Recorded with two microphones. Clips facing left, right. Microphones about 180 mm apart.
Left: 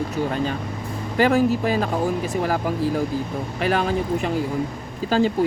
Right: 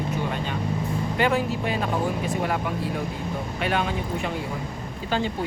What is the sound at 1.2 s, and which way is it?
Speech, 40° left (ahead or behind).